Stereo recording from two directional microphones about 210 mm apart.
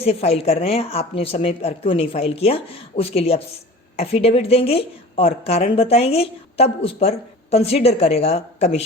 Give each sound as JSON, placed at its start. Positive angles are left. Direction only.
{"t": 0.0, "sound": "a woman's voice", "side_deg": 30}